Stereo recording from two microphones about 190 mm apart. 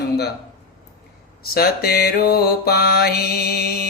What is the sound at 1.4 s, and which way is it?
Speech, 55° left (ahead or behind).